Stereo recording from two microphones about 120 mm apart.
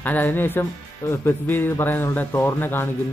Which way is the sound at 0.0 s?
15° left (ahead or behind).